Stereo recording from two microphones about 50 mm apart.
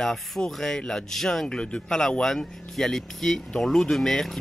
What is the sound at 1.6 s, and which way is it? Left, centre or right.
Speech, centre.